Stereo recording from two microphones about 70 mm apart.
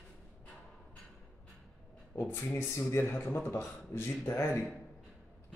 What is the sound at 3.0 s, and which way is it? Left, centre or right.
Speech, left.